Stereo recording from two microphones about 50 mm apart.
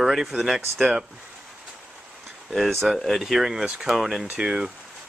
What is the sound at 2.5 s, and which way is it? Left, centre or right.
Speech, centre.